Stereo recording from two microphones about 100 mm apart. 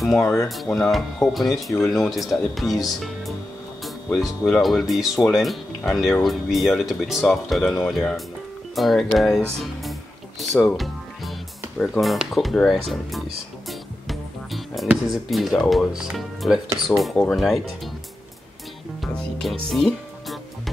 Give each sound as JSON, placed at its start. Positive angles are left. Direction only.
{"t": 0.0, "sound": "speech", "side_deg": 5}
{"t": 3.8, "sound": "music", "side_deg": 0}
{"t": 4.5, "sound": "speech", "side_deg": 0}
{"t": 11.8, "sound": "speech", "side_deg": 0}
{"t": 13.7, "sound": "music", "side_deg": 0}
{"t": 14.9, "sound": "speech", "side_deg": 0}
{"t": 19.4, "sound": "music", "side_deg": 0}